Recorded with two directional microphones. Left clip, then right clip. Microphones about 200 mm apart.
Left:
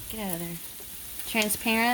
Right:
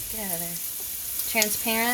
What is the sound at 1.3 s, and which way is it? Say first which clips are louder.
Speech: right 1 dB; 50° left (ahead or behind).